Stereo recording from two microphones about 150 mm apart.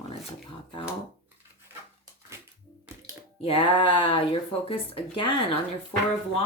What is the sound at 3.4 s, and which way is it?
Speech, 35° left (ahead or behind).